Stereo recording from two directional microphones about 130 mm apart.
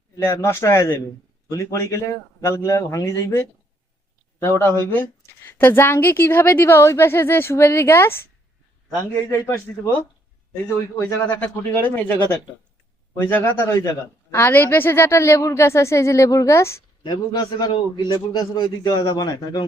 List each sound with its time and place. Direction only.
0.2 s a woman's voice: 20° left (ahead or behind)
9.3 s a woman's voice: 20° left (ahead or behind)
10.9 s a woman's voice: 20° left (ahead or behind)
17.0 s a man's voice: 35° left (ahead or behind)